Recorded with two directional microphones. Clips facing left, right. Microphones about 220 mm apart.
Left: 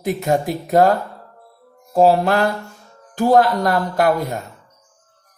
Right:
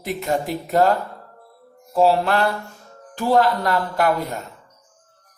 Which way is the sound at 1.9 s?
45° left (ahead or behind).